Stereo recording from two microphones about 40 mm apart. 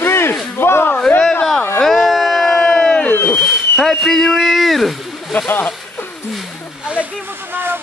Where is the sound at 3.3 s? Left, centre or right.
Centre.